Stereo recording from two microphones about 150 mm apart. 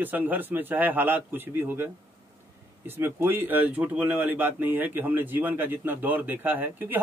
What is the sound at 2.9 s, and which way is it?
Speech, 15° right (ahead or behind).